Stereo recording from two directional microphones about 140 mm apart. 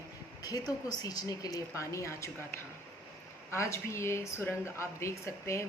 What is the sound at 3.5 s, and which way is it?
Speech, 20° left (ahead or behind).